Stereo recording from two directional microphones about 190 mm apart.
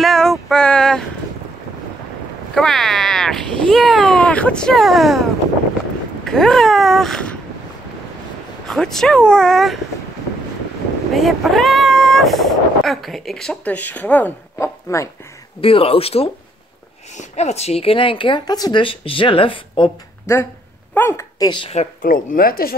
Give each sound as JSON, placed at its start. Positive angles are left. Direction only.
{"t": 0.0, "sound": "a sound", "side_deg": 0}
{"t": 2.5, "sound": "a sound", "side_deg": 0}
{"t": 8.6, "sound": "speech", "side_deg": 0}
{"t": 11.1, "sound": "speech", "side_deg": 0}
{"t": 15.6, "sound": "speech", "side_deg": 30}
{"t": 20.9, "sound": "speech", "side_deg": 10}
{"t": 22.0, "sound": "speech", "side_deg": 50}